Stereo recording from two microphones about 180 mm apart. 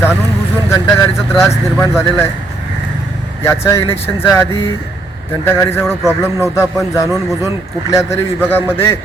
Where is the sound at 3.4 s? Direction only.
15° left (ahead or behind).